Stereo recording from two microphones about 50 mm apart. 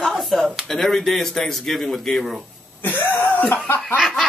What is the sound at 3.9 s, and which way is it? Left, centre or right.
Snicker, centre.